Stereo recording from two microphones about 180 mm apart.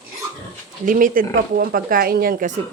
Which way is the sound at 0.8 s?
50° right (ahead or behind).